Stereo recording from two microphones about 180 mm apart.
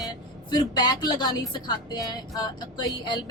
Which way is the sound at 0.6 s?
25° left (ahead or behind).